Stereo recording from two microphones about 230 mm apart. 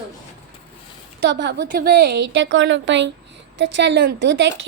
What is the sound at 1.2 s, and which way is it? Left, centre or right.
A woman's voice, right.